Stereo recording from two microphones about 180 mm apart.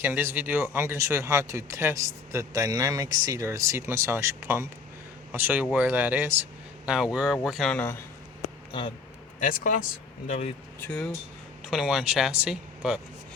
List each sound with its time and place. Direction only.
0.0 s speech: 10° right (ahead or behind); by 8.0 s 10° left (ahead or behind)
8.4 s a sound: 30° left (ahead or behind)
9.4 s speech: 50° left (ahead or behind)
10.2 s speech: 40° left (ahead or behind)
10.8 s speech: 10° left (ahead or behind)